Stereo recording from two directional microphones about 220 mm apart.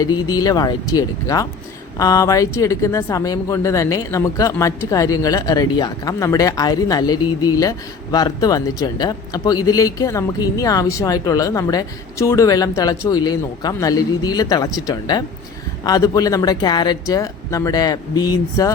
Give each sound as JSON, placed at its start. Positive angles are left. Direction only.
{"t": 0.0, "sound": "speech", "side_deg": 15}